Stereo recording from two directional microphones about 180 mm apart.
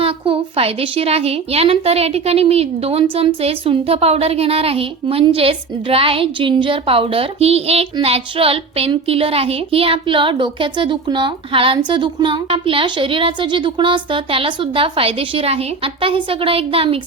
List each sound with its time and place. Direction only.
0.0 s a woman's voice: 30° right (ahead or behind)